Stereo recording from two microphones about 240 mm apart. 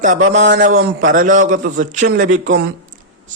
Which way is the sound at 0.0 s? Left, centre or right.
Right.